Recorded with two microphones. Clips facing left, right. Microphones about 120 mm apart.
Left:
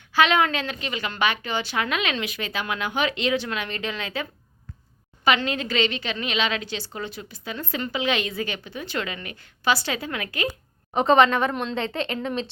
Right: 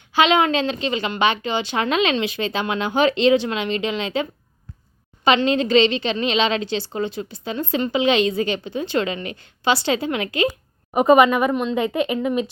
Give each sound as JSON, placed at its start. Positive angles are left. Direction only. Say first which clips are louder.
{"t": 0.1, "sound": "a woman's voice", "louder": "right 3 dB", "side_deg": -20}
{"t": 10.9, "sound": "speech", "louder": "right 4 dB", "side_deg": -10}